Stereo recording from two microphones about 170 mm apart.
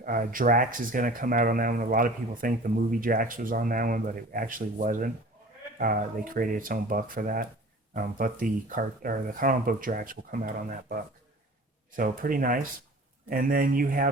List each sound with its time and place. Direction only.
0.0 s speech: 55° right (ahead or behind)